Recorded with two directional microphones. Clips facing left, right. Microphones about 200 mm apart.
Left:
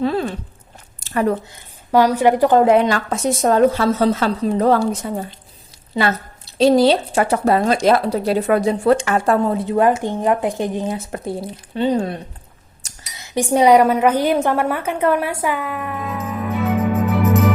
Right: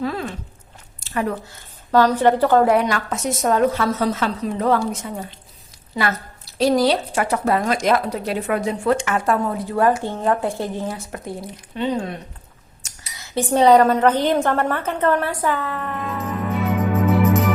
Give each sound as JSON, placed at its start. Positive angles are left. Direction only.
{"t": 0.0, "sound": "speech", "side_deg": 30}
{"t": 1.9, "sound": "a woman's voice", "side_deg": 10}
{"t": 13.1, "sound": "speech", "side_deg": 15}
{"t": 16.9, "sound": "music", "side_deg": 0}